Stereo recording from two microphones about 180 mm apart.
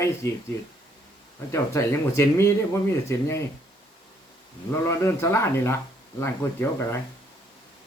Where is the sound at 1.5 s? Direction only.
15° left (ahead or behind).